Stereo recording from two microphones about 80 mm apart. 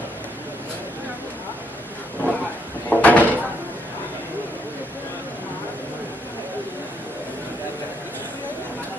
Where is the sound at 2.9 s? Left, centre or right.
Centre.